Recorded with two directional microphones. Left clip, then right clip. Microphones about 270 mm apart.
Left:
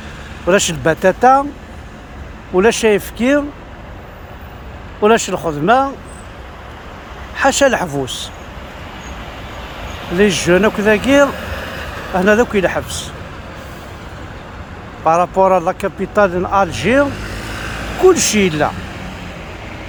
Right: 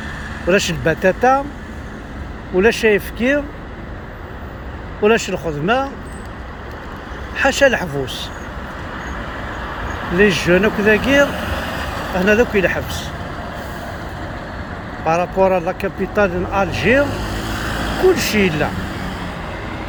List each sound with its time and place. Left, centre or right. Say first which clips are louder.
0.4 s speech: left 3 dB; centre
2.6 s speech: left 2 dB; left
5.0 s speech: left 3 dB; centre
7.3 s speech: left 1 dB; centre
10.2 s speech: left 1 dB; left
11.5 s vehicle: right 2 dB; right
12.1 s speech: left 2 dB; left
15.0 s speech: left 4 dB; left
17.1 s vehicle: right 1 dB; right
18.1 s speech: left 2 dB; left